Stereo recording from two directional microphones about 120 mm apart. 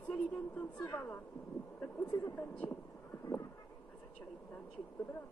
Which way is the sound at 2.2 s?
15° left (ahead or behind).